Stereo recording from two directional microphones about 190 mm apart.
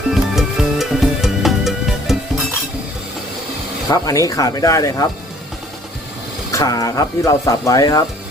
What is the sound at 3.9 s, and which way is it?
Speech, 20° left (ahead or behind).